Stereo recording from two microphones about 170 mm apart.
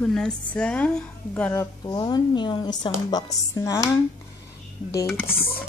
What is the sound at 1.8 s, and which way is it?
Speech, 25° left (ahead or behind).